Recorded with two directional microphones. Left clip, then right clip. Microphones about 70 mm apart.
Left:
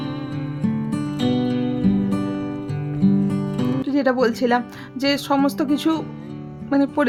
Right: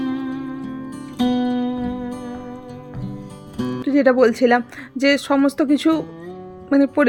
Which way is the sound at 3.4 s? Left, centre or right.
Right.